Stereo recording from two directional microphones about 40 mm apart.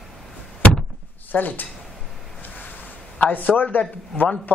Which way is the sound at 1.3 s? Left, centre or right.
Left.